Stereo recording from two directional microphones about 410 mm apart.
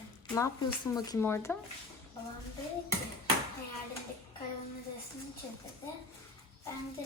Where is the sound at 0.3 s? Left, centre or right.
Centre.